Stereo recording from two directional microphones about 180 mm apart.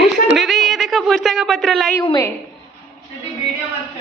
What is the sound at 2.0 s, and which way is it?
Speech, 20° left (ahead or behind).